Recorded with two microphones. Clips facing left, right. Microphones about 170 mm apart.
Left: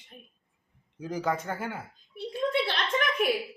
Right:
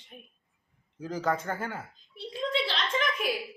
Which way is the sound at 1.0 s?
15° left (ahead or behind).